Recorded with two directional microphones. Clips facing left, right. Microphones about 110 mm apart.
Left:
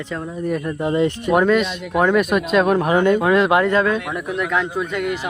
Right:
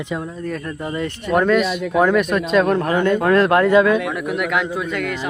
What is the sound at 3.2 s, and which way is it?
Speech, 5° left (ahead or behind).